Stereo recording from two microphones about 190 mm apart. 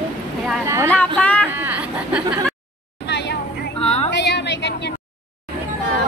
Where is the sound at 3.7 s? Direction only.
35° left (ahead or behind).